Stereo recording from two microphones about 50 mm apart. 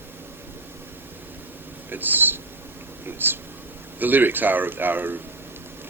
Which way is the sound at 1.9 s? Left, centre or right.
Right.